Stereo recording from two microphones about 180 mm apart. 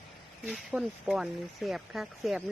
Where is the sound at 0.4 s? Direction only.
5° right (ahead or behind).